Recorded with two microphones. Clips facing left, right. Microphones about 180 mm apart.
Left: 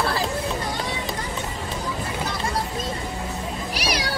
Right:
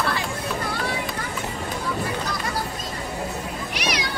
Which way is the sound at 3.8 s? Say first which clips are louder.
Even; 35° left (ahead or behind).